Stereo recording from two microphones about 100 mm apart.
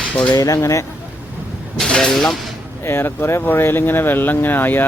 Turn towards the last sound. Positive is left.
turn(degrees=20)  # may be behind; listen again after turning